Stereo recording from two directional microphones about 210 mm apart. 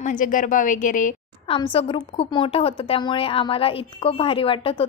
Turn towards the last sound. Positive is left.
turn(degrees=25)  # may be behind; listen again after turning